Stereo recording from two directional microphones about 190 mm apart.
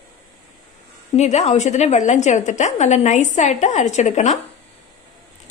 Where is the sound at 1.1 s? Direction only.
35° left (ahead or behind).